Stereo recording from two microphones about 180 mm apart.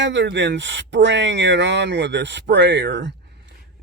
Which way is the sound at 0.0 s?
80° right.